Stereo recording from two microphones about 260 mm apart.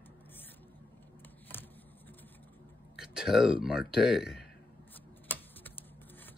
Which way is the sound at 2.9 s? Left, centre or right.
Centre.